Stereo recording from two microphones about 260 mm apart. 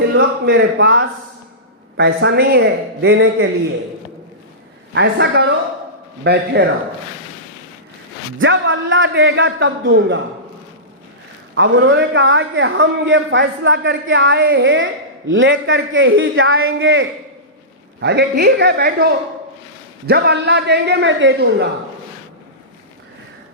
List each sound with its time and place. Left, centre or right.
0.4 s a man's voice: right
4.9 s a man's voice: right
8.4 s a man's voice: right
11.5 s a man's voice: right